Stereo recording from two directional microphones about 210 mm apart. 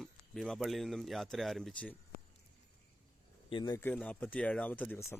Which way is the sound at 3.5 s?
25° left (ahead or behind).